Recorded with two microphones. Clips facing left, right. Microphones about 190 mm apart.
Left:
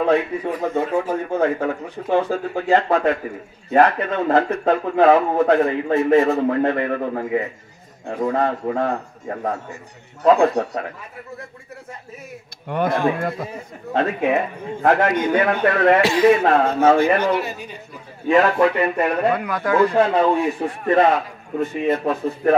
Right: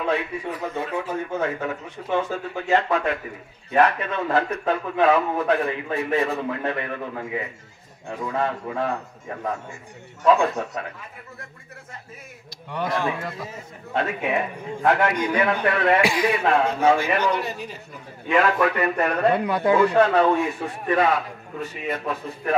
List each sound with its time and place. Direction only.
0.0 s a man's voice: 40° left (ahead or behind)
12.6 s a man's voice: 55° left (ahead or behind)
13.9 s a man's voice: 35° left (ahead or behind)
15.1 s a man's voice: 25° left (ahead or behind)
16.0 s a man's voice: 10° right (ahead or behind)
16.3 s a man's voice: 40° left (ahead or behind)
17.4 s speech: centre (ahead or behind)
18.6 s speech: 20° left (ahead or behind)
19.3 s speech: 25° right (ahead or behind)
20.8 s a man's voice: 45° left (ahead or behind)
21.5 s speech: 25° left (ahead or behind)